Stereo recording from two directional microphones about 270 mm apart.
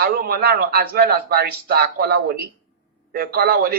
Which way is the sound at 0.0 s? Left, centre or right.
Right.